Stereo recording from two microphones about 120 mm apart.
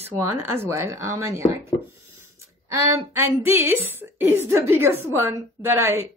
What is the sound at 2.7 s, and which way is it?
A woman's voice, 25° right (ahead or behind).